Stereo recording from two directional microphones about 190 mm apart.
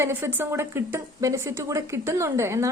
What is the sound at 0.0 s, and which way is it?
A woman's voice, 10° right (ahead or behind).